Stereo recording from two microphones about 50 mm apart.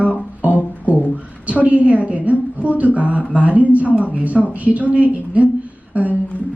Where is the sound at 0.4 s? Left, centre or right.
Right.